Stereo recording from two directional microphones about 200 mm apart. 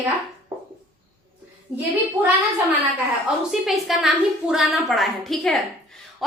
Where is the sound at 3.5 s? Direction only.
Centre (ahead or behind).